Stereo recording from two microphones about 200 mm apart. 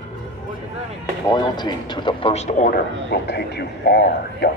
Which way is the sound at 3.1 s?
55° left (ahead or behind).